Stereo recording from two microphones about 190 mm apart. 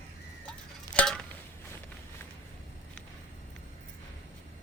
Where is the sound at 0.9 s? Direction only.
5° left (ahead or behind).